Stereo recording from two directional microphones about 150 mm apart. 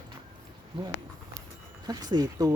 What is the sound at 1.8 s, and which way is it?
Speech, 25° right (ahead or behind).